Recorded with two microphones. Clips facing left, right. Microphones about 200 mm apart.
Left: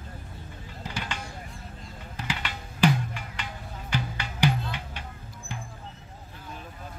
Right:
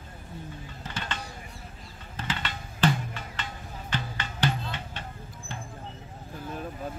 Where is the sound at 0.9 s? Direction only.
10° left (ahead or behind).